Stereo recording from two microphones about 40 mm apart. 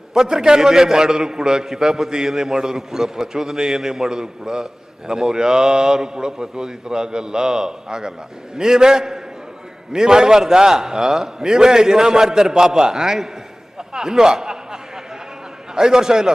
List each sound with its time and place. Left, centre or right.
0.1 s a man's voice: centre
13.7 s a sound: centre
15.7 s a man's voice: centre